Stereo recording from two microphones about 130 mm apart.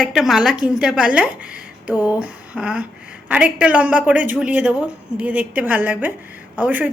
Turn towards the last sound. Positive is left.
turn(degrees=-15)  # may be behind; listen again after turning